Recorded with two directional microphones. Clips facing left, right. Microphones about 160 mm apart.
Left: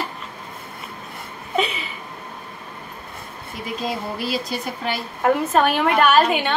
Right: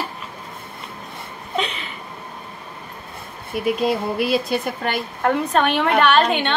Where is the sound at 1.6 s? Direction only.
5° left (ahead or behind).